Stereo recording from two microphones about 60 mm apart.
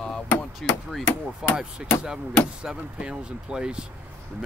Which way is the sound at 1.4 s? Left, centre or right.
Centre.